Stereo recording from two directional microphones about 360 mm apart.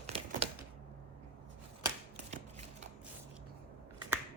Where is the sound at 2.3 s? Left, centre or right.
Centre.